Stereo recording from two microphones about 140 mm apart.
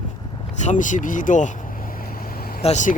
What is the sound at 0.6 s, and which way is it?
Speech, 60° left (ahead or behind).